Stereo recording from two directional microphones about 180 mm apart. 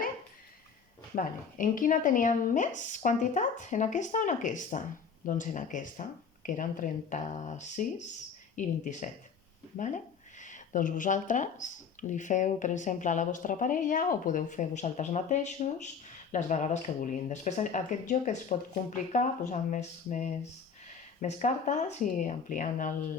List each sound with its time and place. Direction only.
1.1 s speech: 50° left (ahead or behind)